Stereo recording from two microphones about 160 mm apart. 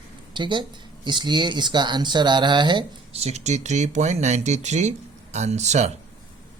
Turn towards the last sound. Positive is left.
turn(degrees=-45)  # may be behind; listen again after turning